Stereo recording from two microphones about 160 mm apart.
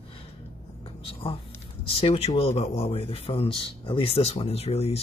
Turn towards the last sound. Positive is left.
turn(degrees=40)  # may be behind; listen again after turning